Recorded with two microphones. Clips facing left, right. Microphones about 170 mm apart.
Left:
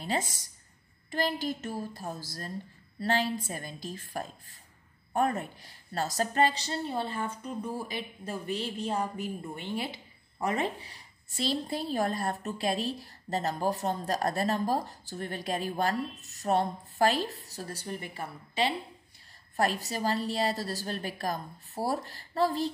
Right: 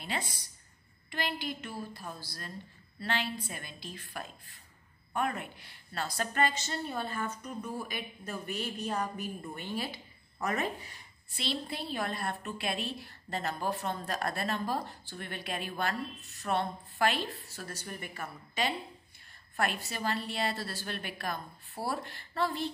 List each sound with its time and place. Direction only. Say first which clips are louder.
0.0 s a sound: left 5 dB; 40° left (ahead or behind)
3.0 s a woman's voice: left 6 dB; 40° left (ahead or behind)
11.3 s a woman's voice: left 5 dB; 40° left (ahead or behind)